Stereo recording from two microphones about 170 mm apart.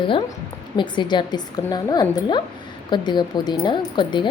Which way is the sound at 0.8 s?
25° left (ahead or behind).